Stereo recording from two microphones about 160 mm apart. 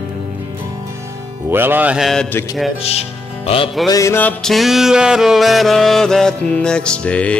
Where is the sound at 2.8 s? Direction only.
40° left (ahead or behind).